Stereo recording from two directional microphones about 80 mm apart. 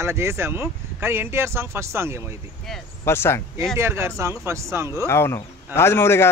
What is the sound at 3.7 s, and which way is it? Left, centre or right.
Speech, right.